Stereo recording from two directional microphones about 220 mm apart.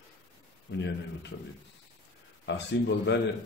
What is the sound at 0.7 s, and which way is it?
Speech, 50° left (ahead or behind).